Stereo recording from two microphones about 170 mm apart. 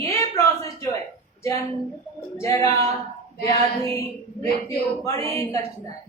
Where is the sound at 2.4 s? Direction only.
20° left (ahead or behind).